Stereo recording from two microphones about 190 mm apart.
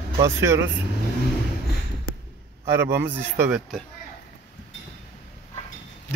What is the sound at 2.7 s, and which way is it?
Speech, 15° right (ahead or behind).